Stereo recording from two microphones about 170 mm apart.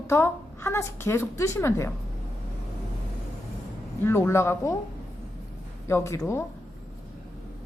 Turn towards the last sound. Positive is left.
turn(degrees=15)  # may be behind; listen again after turning